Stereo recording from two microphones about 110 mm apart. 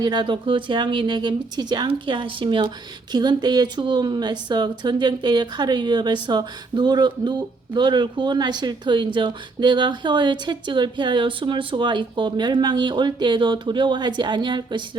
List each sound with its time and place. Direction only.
0.0 s speech: 40° right (ahead or behind)